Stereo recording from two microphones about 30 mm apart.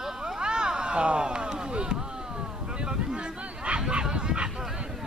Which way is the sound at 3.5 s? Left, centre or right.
Right.